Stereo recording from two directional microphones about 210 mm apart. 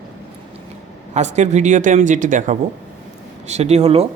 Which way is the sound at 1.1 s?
35° right (ahead or behind).